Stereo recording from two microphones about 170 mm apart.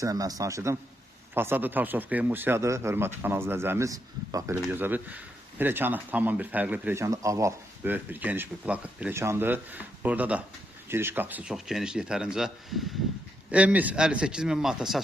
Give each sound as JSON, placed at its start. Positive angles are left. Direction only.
{"t": 0.0, "sound": "a man's voice", "side_deg": -20}